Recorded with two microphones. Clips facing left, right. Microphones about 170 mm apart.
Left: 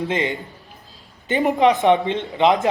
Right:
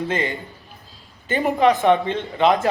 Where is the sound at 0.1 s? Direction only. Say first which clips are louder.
Left 1 dB; 20° left (ahead or behind).